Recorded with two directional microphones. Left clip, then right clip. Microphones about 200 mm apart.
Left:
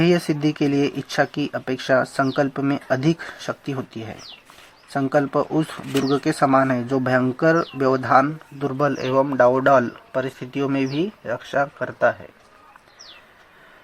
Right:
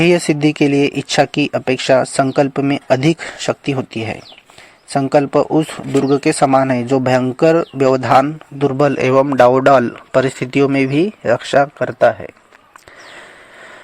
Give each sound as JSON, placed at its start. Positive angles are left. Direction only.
{"t": 0.0, "sound": "speech", "side_deg": -30}